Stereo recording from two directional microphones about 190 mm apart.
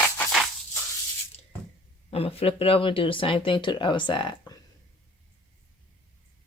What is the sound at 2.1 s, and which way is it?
Speech, 30° left (ahead or behind).